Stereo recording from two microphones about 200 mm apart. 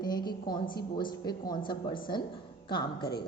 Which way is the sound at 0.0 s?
20° left (ahead or behind).